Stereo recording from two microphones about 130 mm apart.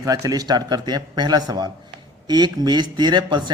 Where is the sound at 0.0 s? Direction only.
25° right (ahead or behind).